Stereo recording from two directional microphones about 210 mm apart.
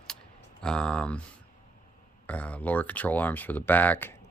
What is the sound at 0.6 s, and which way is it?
Speech, 5° left (ahead or behind).